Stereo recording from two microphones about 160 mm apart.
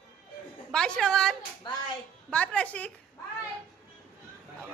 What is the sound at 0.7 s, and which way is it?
A man's voice, 5° left (ahead or behind).